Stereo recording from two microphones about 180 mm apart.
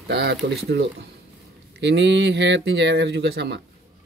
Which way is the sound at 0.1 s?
65° right (ahead or behind).